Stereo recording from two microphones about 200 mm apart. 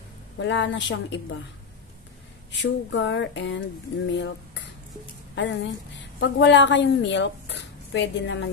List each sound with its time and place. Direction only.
0.4 s a woman's voice: 65° left (ahead or behind)
2.5 s a woman's voice: 65° left (ahead or behind)